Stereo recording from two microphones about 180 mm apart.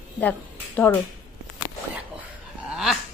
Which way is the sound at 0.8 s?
10° left (ahead or behind).